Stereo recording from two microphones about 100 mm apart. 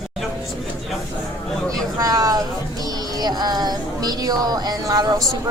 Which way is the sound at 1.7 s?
40° right (ahead or behind).